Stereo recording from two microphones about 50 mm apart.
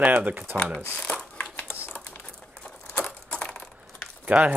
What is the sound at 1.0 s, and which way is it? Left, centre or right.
Crumpling, left.